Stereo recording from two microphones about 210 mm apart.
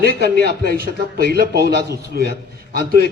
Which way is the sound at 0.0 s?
50° right (ahead or behind).